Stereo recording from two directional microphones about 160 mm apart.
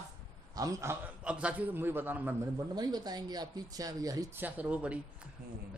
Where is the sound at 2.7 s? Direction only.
25° right (ahead or behind).